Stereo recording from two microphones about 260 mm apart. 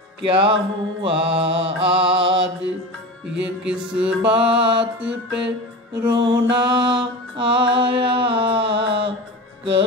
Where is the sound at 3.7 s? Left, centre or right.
Centre.